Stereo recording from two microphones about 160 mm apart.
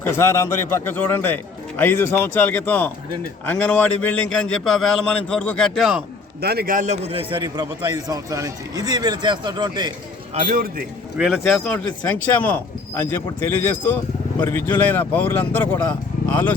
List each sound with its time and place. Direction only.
0.0 s a man's voice: 15° left (ahead or behind); by 6.0 s centre (ahead or behind)
6.4 s a man's voice: 75° right (ahead or behind); by 9.9 s 25° right (ahead or behind)
10.4 s a man's voice: 60° right (ahead or behind)
11.2 s a man's voice: centre (ahead or behind)